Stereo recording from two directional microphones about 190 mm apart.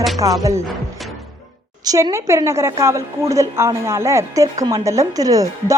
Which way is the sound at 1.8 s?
15° right (ahead or behind).